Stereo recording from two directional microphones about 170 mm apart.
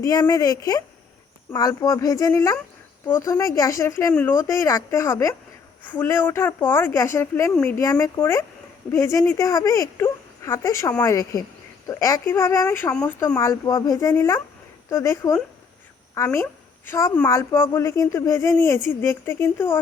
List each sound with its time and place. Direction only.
0.0 s a woman's voice: 20° left (ahead or behind)